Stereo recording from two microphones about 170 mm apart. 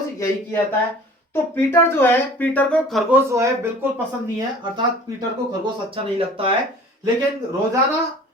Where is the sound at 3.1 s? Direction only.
15° right (ahead or behind).